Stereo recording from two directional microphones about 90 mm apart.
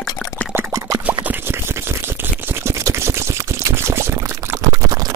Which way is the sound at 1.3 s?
25° right (ahead or behind).